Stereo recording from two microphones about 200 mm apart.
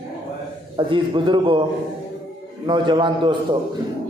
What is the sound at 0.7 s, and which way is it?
Speech, 25° right (ahead or behind).